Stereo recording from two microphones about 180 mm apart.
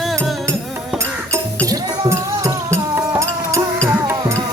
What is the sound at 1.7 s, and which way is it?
Music, 20° right (ahead or behind).